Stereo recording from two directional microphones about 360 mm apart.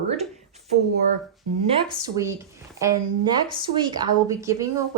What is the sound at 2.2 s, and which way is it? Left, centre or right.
Speech, centre.